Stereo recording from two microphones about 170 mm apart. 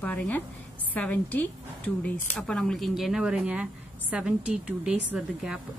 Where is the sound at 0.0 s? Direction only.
10° left (ahead or behind).